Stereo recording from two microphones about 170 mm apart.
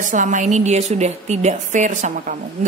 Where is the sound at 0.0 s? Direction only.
50° right (ahead or behind).